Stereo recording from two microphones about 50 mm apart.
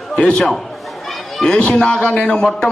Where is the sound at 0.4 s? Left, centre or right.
Centre.